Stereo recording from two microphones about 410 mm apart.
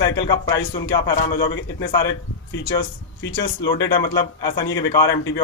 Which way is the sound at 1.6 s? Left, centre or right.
Left.